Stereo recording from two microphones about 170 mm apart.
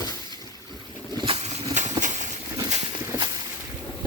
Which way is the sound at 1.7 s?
45° right (ahead or behind).